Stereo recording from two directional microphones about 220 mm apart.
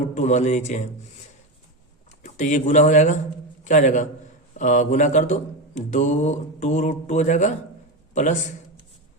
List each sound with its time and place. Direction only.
0.1 s speech: 30° left (ahead or behind)
2.2 s a man's voice: 35° left (ahead or behind)